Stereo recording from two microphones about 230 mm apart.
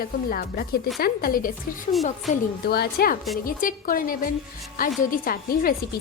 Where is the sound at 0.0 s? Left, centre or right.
Left.